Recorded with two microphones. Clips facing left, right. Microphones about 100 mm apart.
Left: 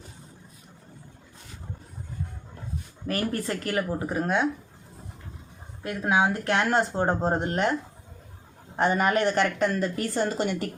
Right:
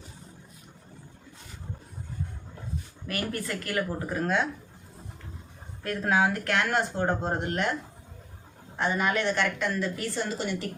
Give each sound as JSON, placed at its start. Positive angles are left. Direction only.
{"t": 3.1, "sound": "speech", "side_deg": 30}
{"t": 5.8, "sound": "speech", "side_deg": 15}
{"t": 8.7, "sound": "a woman's voice", "side_deg": 50}